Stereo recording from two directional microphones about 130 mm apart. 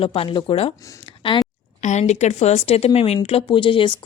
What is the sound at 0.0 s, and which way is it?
Speech, 50° left (ahead or behind).